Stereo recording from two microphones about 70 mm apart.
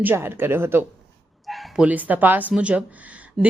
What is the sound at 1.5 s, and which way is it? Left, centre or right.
Bow-wow, centre.